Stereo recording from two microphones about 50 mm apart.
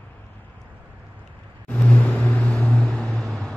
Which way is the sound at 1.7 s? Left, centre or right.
Left.